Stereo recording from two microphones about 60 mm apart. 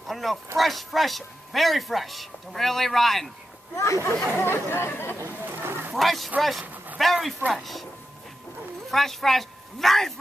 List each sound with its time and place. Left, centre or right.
0.0 s a man's voice: centre
3.7 s speech: left
4.4 s speech: left
5.6 s a sound: right
5.9 s a man's voice: centre
6.6 s a sound: right
7.0 s a man's voice: centre
8.9 s speech: centre